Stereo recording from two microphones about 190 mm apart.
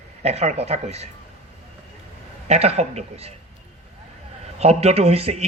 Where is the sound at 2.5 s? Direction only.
35° right (ahead or behind).